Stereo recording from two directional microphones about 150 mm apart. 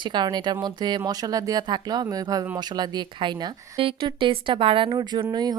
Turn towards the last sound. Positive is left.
turn(degrees=-25)  # may be behind; listen again after turning